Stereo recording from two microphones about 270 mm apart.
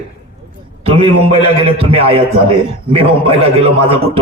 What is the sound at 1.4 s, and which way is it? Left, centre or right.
A man's voice, right.